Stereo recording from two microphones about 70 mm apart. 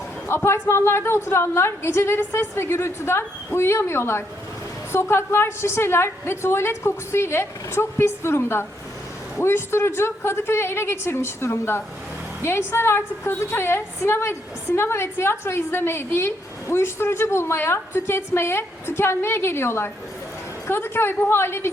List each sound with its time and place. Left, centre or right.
0.3 s a woman's voice: left